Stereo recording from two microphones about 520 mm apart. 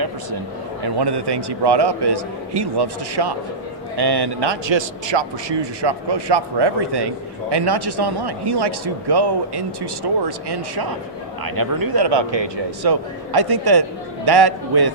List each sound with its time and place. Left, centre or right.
0.8 s speech: right